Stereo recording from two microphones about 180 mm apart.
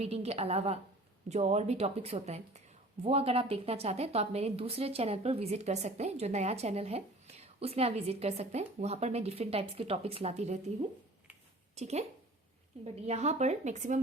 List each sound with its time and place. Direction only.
0.0 s a woman's voice: 35° right (ahead or behind)
11.8 s a woman's voice: 35° right (ahead or behind)